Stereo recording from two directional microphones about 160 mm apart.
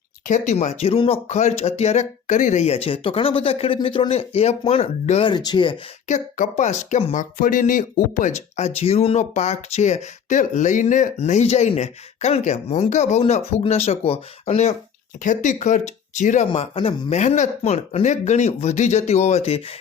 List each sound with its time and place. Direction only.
0.3 s speech: 50° left (ahead or behind)
5.3 s speech: 25° left (ahead or behind)
6.1 s speech: 50° left (ahead or behind)
16.5 s speech: 35° left (ahead or behind)